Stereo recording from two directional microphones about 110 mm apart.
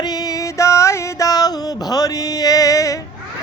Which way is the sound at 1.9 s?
35° left (ahead or behind).